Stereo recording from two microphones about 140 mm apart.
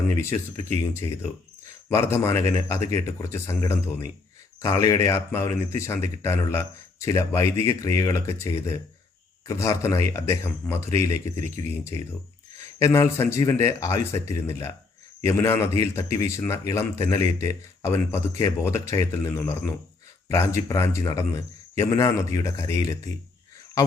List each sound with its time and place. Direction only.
0.2 s speech: 20° left (ahead or behind)